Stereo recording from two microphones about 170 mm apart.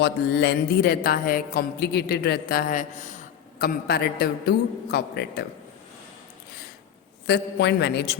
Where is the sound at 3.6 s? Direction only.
65° left (ahead or behind).